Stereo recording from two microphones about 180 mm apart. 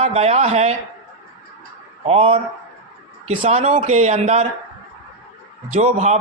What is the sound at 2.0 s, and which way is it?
Speech, 35° right (ahead or behind).